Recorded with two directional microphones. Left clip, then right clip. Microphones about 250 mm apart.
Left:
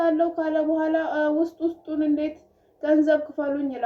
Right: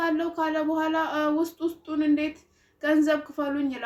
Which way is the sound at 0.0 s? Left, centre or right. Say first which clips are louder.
Left 4 dB; right.